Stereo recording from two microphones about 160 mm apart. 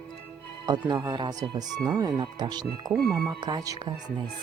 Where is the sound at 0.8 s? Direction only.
25° right (ahead or behind).